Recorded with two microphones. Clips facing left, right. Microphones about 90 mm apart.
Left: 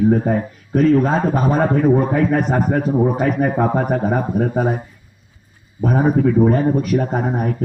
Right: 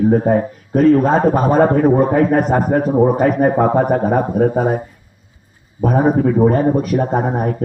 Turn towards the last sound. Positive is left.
turn(degrees=-30)  # may be behind; listen again after turning